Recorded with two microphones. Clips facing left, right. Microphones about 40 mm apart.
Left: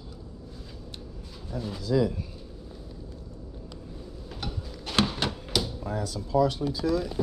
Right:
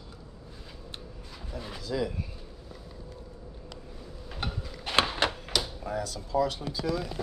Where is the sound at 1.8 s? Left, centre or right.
Centre.